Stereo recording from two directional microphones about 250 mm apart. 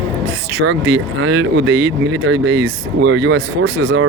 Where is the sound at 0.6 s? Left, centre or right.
Right.